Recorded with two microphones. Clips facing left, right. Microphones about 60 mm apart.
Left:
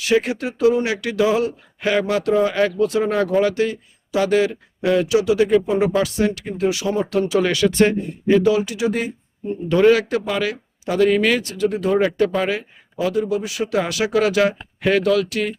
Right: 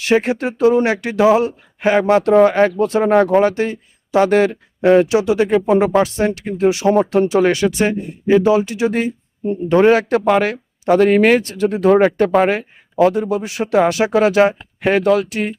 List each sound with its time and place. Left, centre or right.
0.0 s speech: right
2.3 s speech: right
2.6 s speech: right
6.8 s speech: right
7.1 s speech: right
7.8 s speech: centre; by 9.1 s right
9.6 s speech: right